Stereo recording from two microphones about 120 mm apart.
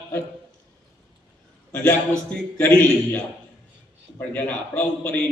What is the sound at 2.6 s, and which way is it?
Speech, 15° left (ahead or behind).